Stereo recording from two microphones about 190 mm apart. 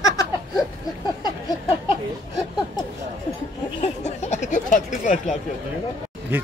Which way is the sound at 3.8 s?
35° left (ahead or behind).